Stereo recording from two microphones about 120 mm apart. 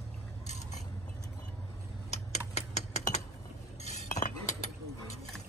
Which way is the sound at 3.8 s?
85° left.